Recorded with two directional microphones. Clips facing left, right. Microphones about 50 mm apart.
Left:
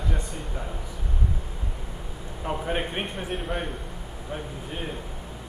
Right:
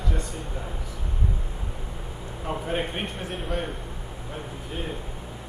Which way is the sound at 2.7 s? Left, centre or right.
Centre.